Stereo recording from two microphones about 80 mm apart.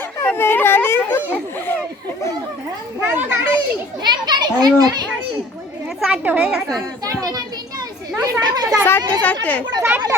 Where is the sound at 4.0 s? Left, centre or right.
Right.